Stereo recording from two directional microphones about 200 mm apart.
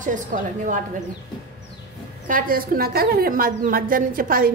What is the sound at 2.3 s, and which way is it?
A woman's voice, 45° right (ahead or behind).